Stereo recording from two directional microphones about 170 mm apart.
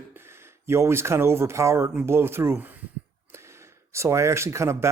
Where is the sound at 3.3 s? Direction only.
15° right (ahead or behind).